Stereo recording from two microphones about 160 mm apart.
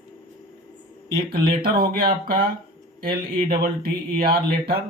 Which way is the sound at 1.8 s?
70° right (ahead or behind).